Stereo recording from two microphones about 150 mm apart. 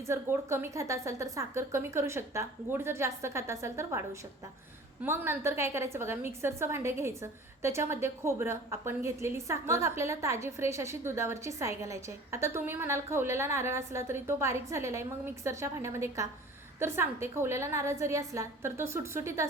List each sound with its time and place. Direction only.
0.0 s a woman's voice: 20° right (ahead or behind)